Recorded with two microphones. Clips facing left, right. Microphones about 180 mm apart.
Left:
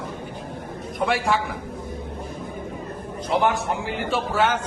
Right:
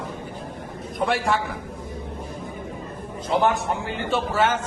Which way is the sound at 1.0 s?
Centre (ahead or behind).